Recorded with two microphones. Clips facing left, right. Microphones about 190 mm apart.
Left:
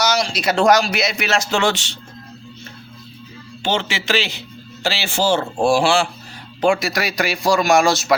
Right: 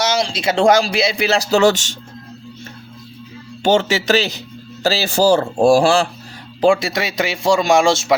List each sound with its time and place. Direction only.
0.0 s speech: 25° right (ahead or behind); by 2.0 s 45° right (ahead or behind)
3.6 s speech: 45° right (ahead or behind)
6.6 s speech: 30° right (ahead or behind)